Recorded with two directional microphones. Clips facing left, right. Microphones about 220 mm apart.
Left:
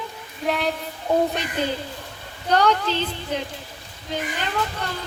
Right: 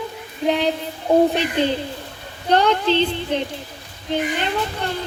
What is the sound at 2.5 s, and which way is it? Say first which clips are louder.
Speech: right 3 dB; 30° right (ahead or behind).